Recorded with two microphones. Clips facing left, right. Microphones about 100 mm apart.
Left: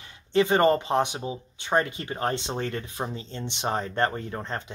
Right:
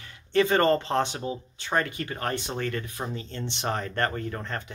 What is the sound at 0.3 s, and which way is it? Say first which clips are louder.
Speech: left 1 dB; 20° left (ahead or behind).